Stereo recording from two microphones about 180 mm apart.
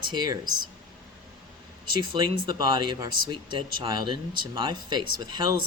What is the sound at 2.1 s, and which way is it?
Speech, 25° right (ahead or behind).